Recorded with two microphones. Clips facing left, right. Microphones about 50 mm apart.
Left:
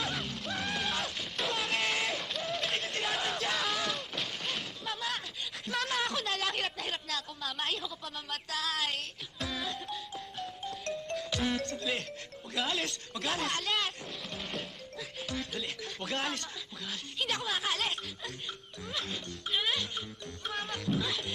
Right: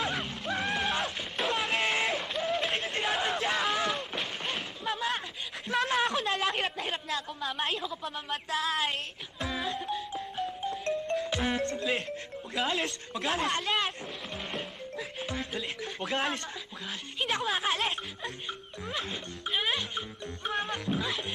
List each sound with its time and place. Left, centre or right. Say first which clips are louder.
0.0 s music: right 3 dB; right
1.5 s a sound: right 3 dB; centre
6.0 s a woman's voice: right 4 dB; centre
9.4 s music: right 4 dB; centre
11.2 s music: right 3 dB; right
11.9 s speech: right 4 dB; centre
12.8 s music: right 3 dB; centre
15.8 s speech: right 5 dB; centre
17.3 s music: right 5 dB; centre
17.9 s music: right 3 dB; centre